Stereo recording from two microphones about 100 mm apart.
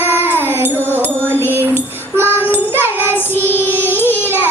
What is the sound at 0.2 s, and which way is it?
Music, 20° right (ahead or behind).